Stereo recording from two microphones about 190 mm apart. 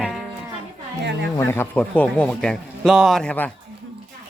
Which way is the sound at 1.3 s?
10° left (ahead or behind).